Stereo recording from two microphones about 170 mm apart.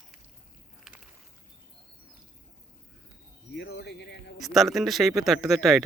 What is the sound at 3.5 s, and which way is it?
Speech, 85° left.